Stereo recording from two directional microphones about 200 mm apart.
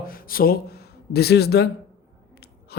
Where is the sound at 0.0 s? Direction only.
45° left (ahead or behind).